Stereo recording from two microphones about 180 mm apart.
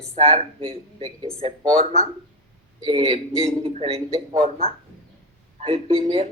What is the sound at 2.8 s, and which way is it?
Speech, 35° right (ahead or behind).